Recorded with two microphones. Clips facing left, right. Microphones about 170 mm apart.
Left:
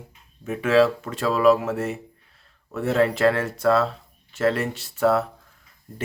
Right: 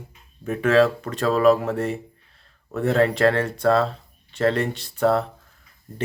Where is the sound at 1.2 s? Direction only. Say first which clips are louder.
Right 1 dB; 45° right (ahead or behind).